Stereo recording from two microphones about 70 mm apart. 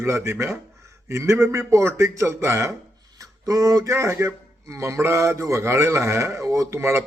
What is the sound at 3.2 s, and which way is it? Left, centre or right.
Speech, right.